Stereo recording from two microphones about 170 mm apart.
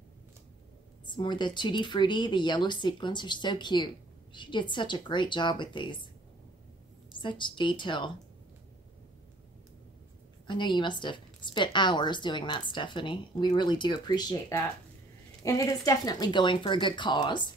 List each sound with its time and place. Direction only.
1.0 s speech: 25° left (ahead or behind)
7.2 s speech: 30° left (ahead or behind)
10.4 s speech: 30° left (ahead or behind)
15.4 s speech: 20° left (ahead or behind)